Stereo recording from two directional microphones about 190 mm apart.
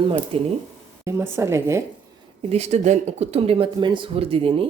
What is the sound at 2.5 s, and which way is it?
Speech, 35° right (ahead or behind).